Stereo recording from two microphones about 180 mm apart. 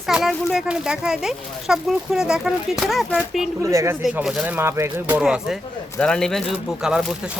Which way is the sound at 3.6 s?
15° right (ahead or behind).